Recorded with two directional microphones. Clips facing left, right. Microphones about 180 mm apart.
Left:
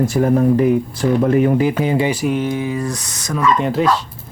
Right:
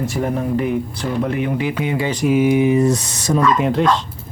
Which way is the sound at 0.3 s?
40° left (ahead or behind).